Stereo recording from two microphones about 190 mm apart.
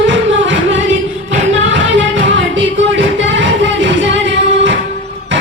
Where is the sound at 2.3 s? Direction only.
75° right (ahead or behind).